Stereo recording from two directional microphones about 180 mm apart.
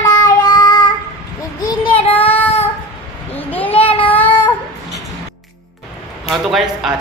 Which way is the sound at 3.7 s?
30° left (ahead or behind).